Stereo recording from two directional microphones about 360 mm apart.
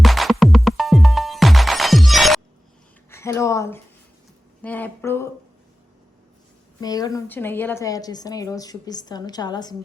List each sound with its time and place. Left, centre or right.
0.0 s music: centre
3.1 s speech: centre
6.7 s a woman's voice: centre